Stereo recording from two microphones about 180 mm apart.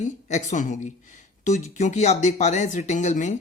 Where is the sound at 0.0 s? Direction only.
40° left (ahead or behind).